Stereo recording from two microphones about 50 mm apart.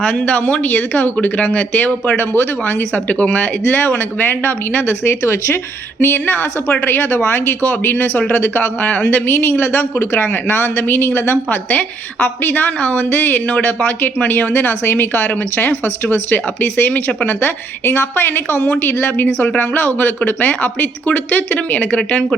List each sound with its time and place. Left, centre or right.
0.0 s a woman's voice: left
5.2 s speech: left
6.0 s a woman's voice: left
9.9 s a woman's voice: left